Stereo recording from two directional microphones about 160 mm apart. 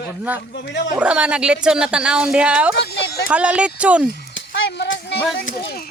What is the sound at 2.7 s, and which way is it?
Speech, 90° left.